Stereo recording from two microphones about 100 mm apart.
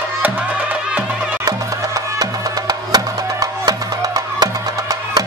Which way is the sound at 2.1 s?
40° right (ahead or behind).